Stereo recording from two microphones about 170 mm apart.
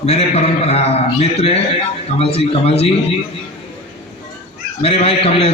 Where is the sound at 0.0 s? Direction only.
40° left (ahead or behind).